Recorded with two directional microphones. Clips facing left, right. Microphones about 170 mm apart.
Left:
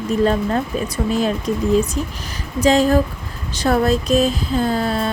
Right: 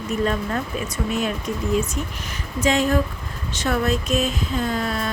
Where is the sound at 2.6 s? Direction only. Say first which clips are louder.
Left 5 dB; 35° left (ahead or behind).